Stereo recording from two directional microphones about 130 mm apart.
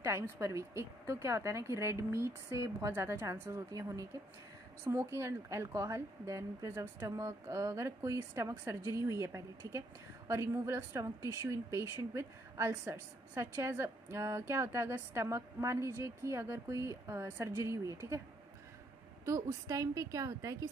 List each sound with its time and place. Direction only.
0.0 s a woman's voice: 20° right (ahead or behind)
19.2 s a woman's voice: 25° right (ahead or behind)